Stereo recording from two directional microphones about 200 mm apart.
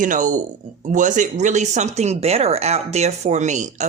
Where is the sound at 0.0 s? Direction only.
40° right (ahead or behind).